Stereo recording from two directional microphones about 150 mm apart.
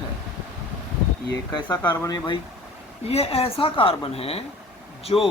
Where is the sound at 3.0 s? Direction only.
40° left (ahead or behind).